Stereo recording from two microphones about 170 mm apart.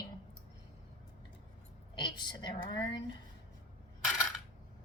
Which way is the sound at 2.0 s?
25° left (ahead or behind).